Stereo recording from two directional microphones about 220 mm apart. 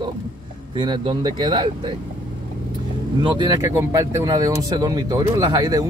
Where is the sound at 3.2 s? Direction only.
20° right (ahead or behind).